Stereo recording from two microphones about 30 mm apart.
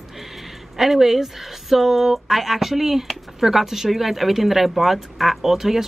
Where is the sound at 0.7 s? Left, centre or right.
Centre.